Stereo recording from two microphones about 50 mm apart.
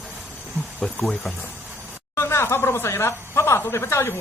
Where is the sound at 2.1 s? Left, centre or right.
Left.